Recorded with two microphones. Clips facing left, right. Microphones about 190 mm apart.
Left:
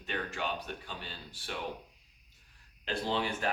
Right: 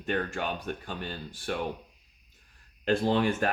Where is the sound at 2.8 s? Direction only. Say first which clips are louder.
Right 8 dB; 50° right (ahead or behind).